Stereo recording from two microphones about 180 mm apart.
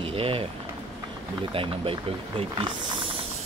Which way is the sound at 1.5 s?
30° right (ahead or behind).